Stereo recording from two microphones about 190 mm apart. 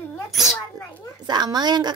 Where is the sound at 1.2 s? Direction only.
20° right (ahead or behind).